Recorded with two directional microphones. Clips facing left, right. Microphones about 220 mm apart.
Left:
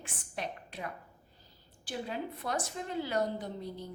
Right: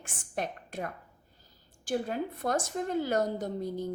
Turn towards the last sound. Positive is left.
turn(degrees=-45)  # may be behind; listen again after turning